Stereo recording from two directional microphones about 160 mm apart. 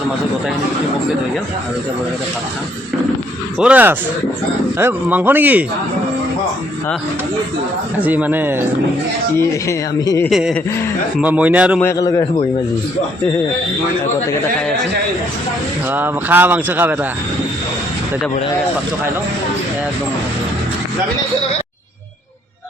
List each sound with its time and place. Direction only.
3.6 s speech: 10° right (ahead or behind)
7.9 s speech: 10° right (ahead or behind)
9.4 s speech: 15° left (ahead or behind)
10.2 s speech: centre (ahead or behind)
11.8 s a man's voice: 20° left (ahead or behind)
15.9 s speech: 10° right (ahead or behind)